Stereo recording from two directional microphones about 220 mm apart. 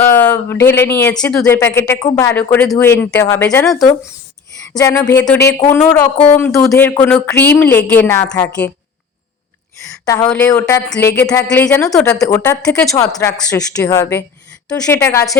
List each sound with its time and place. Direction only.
0.0 s speech: 10° left (ahead or behind)
4.8 s speech: 15° left (ahead or behind)
10.2 s speech: 5° left (ahead or behind)